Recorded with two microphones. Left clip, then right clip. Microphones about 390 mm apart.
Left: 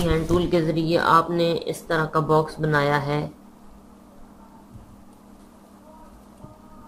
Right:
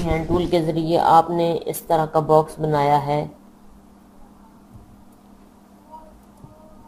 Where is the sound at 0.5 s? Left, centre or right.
Centre.